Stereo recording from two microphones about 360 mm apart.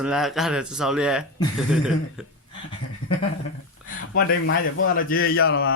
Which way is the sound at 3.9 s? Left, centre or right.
Left.